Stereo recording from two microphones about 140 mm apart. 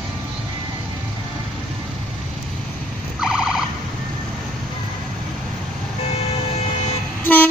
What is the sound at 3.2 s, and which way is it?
Car alarm, 5° right (ahead or behind).